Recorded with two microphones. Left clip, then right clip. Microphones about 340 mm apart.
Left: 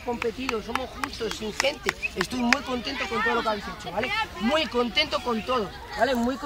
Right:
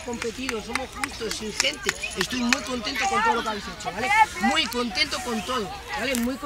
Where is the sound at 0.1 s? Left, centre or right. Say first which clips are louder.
Left 2 dB; centre.